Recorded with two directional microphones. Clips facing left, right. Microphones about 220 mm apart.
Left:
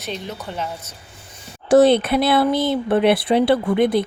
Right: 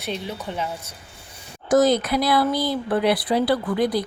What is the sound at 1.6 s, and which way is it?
Speech, 30° left (ahead or behind).